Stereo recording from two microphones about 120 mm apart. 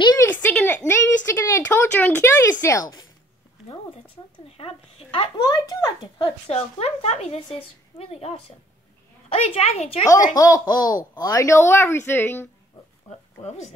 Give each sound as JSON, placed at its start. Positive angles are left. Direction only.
{"t": 0.2, "sound": "a sound", "side_deg": 15}
{"t": 4.5, "sound": "a sound", "side_deg": 55}
{"t": 5.4, "sound": "speech", "side_deg": 30}
{"t": 6.5, "sound": "speech", "side_deg": 60}
{"t": 10.3, "sound": "speech", "side_deg": 30}
{"t": 13.4, "sound": "speech", "side_deg": 70}